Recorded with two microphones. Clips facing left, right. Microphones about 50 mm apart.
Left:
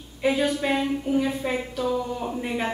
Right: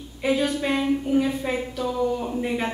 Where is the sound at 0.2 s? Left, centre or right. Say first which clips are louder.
Even; centre.